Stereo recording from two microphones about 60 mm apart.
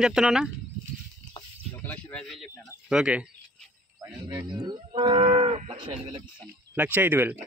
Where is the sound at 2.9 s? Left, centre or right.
Centre.